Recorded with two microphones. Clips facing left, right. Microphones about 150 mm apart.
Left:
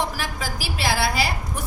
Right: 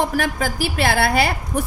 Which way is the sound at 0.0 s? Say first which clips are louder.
Right 7 dB; 55° right (ahead or behind).